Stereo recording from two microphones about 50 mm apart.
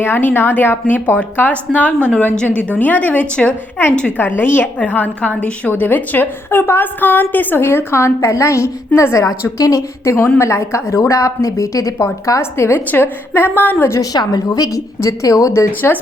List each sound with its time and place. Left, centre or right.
0.0 s a woman's voice: left; by 2.6 s centre
2.7 s a woman's voice: left
9.0 s a woman's voice: left
12.2 s a woman's voice: left
12.9 s a woman's voice: left
14.7 s a woman's voice: left